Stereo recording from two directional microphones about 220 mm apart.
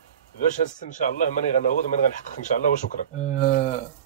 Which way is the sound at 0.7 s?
35° left (ahead or behind).